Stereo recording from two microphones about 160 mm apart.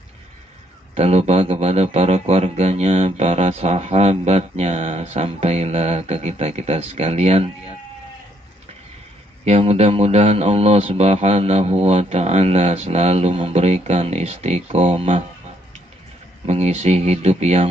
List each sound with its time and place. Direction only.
0.9 s speech: 40° right (ahead or behind)
9.4 s speech: 40° right (ahead or behind)
16.4 s speech: 40° right (ahead or behind)